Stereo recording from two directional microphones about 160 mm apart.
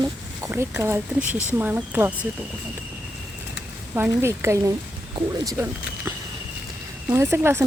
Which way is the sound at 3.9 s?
15° right (ahead or behind).